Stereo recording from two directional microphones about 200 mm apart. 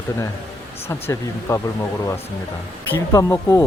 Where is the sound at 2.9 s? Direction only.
15° left (ahead or behind).